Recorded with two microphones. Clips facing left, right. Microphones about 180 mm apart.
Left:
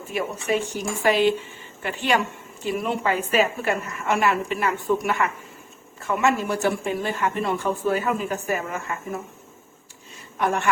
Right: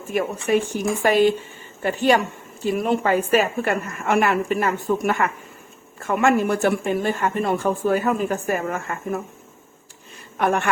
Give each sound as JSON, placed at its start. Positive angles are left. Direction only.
{"t": 0.1, "sound": "a woman's voice", "side_deg": -50}
{"t": 10.3, "sound": "a man's voice", "side_deg": -60}